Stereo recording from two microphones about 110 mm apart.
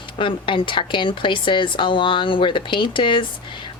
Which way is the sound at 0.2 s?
50° left (ahead or behind).